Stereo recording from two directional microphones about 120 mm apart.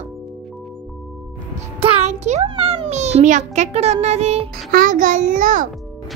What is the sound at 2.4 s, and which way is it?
A child's voice, 55° right (ahead or behind).